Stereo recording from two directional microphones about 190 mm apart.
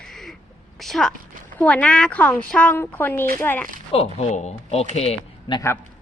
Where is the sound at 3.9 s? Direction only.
30° left (ahead or behind).